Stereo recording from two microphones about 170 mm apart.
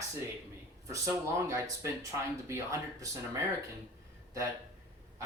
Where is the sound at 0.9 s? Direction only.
15° right (ahead or behind).